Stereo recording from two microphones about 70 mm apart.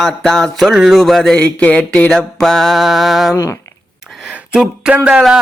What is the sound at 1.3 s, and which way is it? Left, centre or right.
Mantra, centre.